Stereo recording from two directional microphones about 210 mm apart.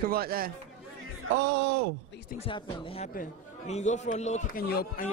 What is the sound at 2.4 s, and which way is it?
Speech, 25° left (ahead or behind).